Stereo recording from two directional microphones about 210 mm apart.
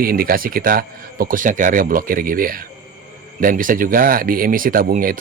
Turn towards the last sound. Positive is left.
turn(degrees=-40)  # may be behind; listen again after turning